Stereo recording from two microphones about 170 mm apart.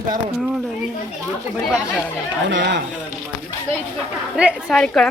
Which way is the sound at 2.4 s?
90° right.